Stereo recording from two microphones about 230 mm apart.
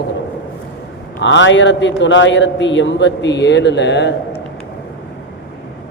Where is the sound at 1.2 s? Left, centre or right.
Left.